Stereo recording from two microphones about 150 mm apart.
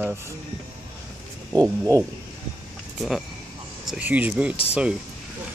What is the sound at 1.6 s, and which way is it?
Speech, 20° right (ahead or behind).